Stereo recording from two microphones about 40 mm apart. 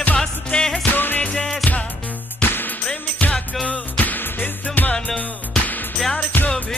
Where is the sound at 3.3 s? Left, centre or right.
Left.